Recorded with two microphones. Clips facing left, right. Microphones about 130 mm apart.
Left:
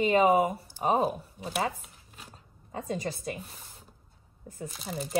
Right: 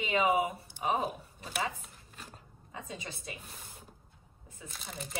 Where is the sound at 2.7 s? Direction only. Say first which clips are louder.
Left 10 dB; 45° left (ahead or behind).